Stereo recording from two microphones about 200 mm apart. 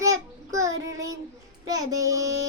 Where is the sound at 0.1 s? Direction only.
15° right (ahead or behind).